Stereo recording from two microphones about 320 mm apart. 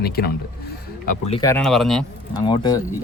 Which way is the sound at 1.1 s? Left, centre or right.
Centre.